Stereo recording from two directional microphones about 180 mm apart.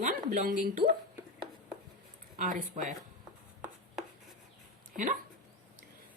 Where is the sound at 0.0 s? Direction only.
45° right (ahead or behind).